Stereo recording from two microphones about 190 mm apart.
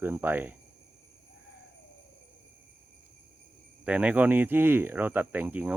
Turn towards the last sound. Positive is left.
turn(degrees=-10)  # may be behind; listen again after turning